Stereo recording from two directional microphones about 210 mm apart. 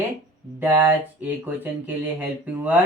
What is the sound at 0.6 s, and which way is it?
Speech, 10° right (ahead or behind).